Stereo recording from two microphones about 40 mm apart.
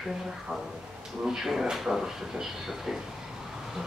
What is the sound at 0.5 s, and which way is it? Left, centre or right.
Speech, right.